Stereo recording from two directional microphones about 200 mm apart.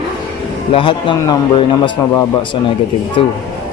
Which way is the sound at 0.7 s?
25° left (ahead or behind).